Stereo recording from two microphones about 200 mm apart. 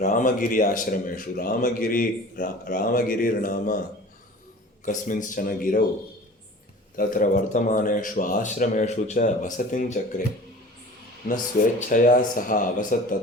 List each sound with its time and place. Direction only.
0.0 s speech: 40° left (ahead or behind)
4.9 s a man's voice: 40° left (ahead or behind)
6.9 s a man's voice: 45° left (ahead or behind)
11.9 s a man's voice: 40° left (ahead or behind)